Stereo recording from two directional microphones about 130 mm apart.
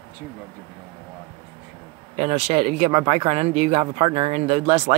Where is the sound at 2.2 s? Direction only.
55° right (ahead or behind).